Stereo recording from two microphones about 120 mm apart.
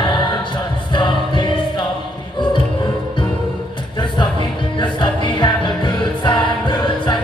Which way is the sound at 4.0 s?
40° left (ahead or behind).